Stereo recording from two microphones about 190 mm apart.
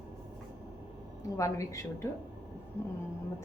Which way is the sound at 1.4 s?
15° left (ahead or behind).